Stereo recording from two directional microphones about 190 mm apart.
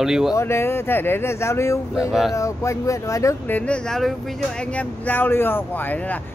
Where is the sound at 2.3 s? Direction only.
15° left (ahead or behind).